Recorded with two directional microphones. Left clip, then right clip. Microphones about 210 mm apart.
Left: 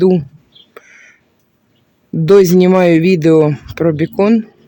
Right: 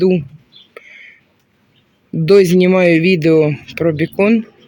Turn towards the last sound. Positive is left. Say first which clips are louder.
# left 1 dB
turn(degrees=5)  # may be behind; listen again after turning